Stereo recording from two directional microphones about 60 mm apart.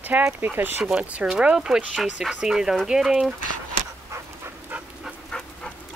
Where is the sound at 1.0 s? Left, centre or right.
Right.